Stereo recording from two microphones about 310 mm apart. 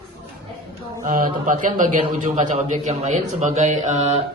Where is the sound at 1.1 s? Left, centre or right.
Right.